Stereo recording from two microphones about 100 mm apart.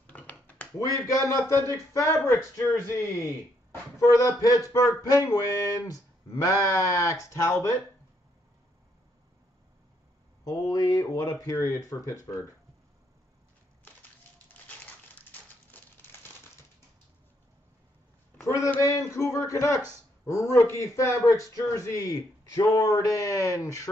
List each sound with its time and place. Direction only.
0.0 s a sound: 15° left (ahead or behind)
0.7 s a man's voice: 30° left (ahead or behind)
4.1 s a man's voice: 35° left (ahead or behind)
10.4 s a man's voice: 40° left (ahead or behind)
15.7 s crumpling: 20° left (ahead or behind)
18.4 s a man's voice: 35° left (ahead or behind)